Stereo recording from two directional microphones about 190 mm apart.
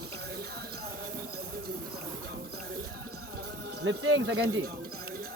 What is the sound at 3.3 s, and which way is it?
Music, 55° right (ahead or behind).